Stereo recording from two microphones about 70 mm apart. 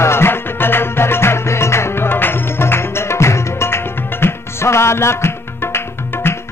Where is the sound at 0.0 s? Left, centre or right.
Left.